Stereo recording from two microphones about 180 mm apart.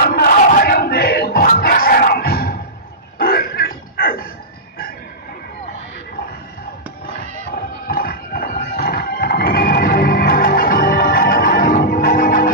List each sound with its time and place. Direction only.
0.1 s battle cry: 55° left (ahead or behind)
3.2 s a sound: 55° left (ahead or behind)
7.9 s music: 55° left (ahead or behind)